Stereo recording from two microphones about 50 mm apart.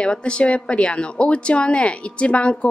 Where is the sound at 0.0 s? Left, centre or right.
Left.